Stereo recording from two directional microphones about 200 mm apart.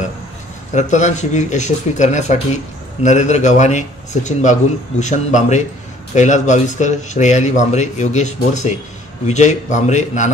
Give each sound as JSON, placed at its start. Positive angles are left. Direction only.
{"t": 0.7, "sound": "speech", "side_deg": 35}